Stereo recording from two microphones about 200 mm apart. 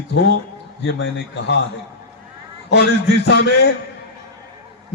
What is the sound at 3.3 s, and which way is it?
Speech, 55° left (ahead or behind).